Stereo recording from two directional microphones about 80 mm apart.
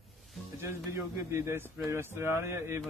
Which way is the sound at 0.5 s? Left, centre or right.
Right.